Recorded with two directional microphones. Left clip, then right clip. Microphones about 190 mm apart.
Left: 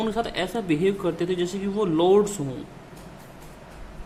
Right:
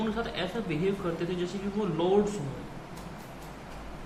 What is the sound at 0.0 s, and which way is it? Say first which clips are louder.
Speech: left 6 dB; 50° left (ahead or behind).